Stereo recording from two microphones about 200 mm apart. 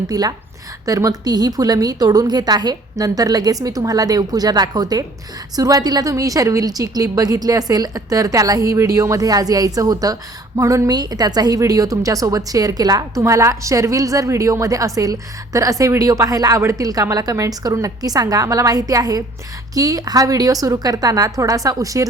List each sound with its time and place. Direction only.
0.1 s a woman's voice: 20° right (ahead or behind)